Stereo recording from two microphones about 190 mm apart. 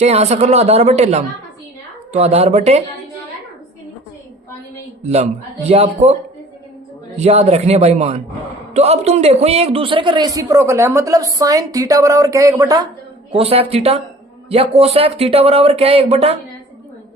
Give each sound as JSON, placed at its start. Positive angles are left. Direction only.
{"t": 0.0, "sound": "speech", "side_deg": -35}
{"t": 5.0, "sound": "speech", "side_deg": -35}
{"t": 7.2, "sound": "speech", "side_deg": -35}
{"t": 13.3, "sound": "speech", "side_deg": -30}